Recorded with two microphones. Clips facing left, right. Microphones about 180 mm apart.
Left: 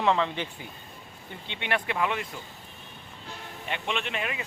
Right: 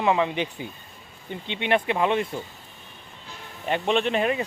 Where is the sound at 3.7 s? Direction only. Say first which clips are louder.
Right 9 dB; 40° right (ahead or behind).